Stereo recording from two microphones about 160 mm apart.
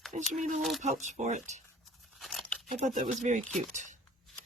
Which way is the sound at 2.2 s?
Centre (ahead or behind).